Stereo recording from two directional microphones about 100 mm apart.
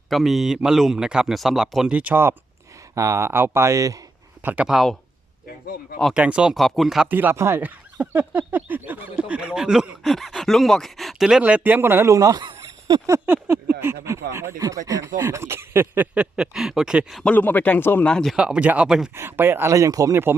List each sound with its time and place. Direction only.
0.1 s speech: centre (ahead or behind)
2.9 s speech: 30° right (ahead or behind)
4.4 s speech: 15° right (ahead or behind)
4.7 s speech: centre (ahead or behind)
6.1 s speech: 10° right (ahead or behind)
7.1 s speech: 20° right (ahead or behind); by 12.5 s 35° right (ahead or behind)
12.5 s a sound: 35° right (ahead or behind)
13.1 s speech: 20° right (ahead or behind)
16.1 s speech: 10° right (ahead or behind)
17.3 s speech: 15° left (ahead or behind)
18.0 s speech: 5° left (ahead or behind)
18.3 s speech: 10° right (ahead or behind)
19.1 s speech: 25° right (ahead or behind)